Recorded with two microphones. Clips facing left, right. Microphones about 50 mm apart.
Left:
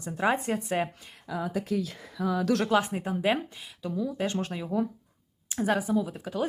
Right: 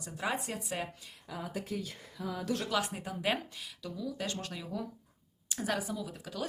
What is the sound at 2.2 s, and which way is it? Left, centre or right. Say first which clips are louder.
Speech: left 9 dB; left.